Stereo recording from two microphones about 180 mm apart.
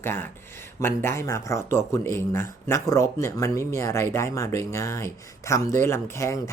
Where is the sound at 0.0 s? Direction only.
15° left (ahead or behind).